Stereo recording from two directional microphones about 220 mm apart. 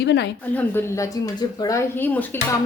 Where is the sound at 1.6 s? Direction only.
15° left (ahead or behind).